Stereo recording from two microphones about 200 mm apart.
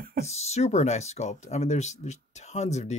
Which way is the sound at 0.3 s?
30° left (ahead or behind).